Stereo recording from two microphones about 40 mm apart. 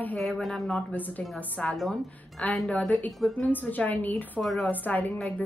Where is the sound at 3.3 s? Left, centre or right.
Left.